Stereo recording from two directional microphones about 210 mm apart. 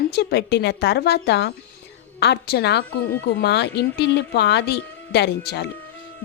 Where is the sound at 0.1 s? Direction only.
50° left (ahead or behind).